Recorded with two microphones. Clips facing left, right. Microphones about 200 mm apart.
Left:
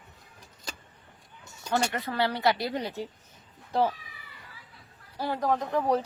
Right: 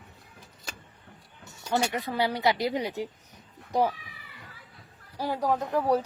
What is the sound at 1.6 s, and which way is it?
A woman's voice, 10° right (ahead or behind).